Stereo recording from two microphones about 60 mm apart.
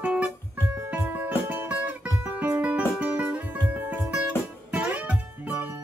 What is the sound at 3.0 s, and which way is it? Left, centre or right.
Music, right.